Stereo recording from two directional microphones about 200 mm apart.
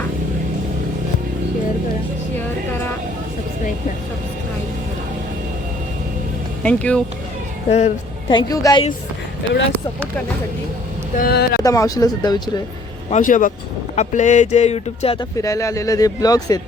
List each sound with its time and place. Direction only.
6.6 s speech: 5° left (ahead or behind)
7.7 s speech: 35° left (ahead or behind)
11.2 s speech: 50° left (ahead or behind)
11.6 s speech: 15° left (ahead or behind)
13.1 s speech: 40° left (ahead or behind); by 16.6 s 20° left (ahead or behind)